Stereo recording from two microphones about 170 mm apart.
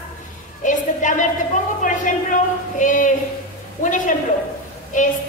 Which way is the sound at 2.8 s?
50° left (ahead or behind).